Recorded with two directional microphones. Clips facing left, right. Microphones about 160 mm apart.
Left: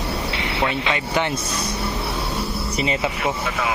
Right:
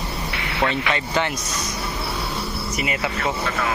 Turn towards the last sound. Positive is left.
turn(degrees=10)  # may be behind; listen again after turning